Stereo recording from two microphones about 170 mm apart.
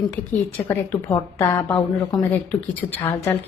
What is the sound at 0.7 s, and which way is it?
Speech, 10° left (ahead or behind).